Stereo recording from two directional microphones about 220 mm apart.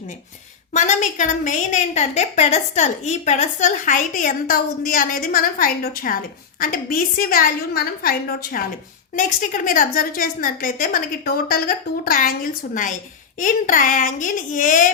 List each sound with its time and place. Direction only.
0.7 s a woman's voice: 35° left (ahead or behind)